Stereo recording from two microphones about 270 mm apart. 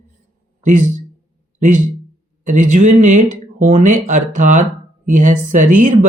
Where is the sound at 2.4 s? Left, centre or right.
Right.